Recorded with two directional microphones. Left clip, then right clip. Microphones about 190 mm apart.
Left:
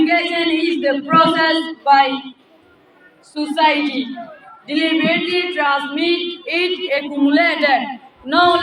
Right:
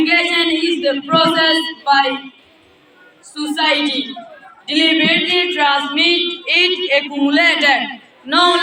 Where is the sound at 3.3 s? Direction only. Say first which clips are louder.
Left 1 dB; 40° left (ahead or behind).